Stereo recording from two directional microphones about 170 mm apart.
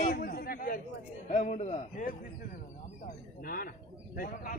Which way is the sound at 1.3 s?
45° left (ahead or behind).